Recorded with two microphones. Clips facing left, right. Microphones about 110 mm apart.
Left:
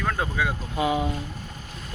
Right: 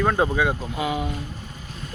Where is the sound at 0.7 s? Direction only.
20° left (ahead or behind).